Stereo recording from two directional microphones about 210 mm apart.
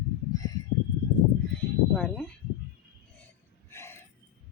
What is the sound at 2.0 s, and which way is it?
Speech, 5° left (ahead or behind).